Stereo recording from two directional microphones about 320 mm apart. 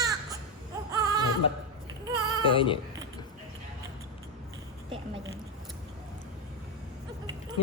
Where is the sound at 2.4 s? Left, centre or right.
Centre.